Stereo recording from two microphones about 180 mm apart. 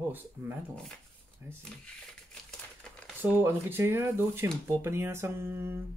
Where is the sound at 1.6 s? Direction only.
5° left (ahead or behind).